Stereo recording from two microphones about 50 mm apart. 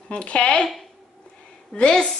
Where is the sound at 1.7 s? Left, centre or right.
Centre.